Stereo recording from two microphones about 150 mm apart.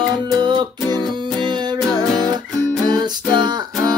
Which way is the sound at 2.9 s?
30° right (ahead or behind).